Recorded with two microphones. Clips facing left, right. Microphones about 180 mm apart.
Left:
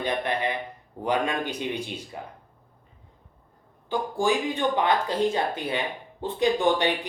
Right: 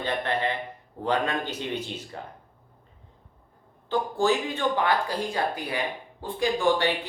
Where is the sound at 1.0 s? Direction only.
15° left (ahead or behind).